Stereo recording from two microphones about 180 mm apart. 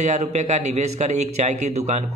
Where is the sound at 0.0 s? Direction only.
40° right (ahead or behind).